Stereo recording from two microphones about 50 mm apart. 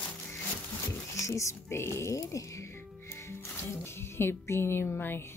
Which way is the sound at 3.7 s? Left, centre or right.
Left.